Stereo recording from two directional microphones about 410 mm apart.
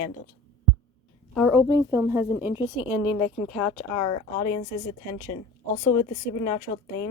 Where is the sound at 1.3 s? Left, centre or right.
Centre.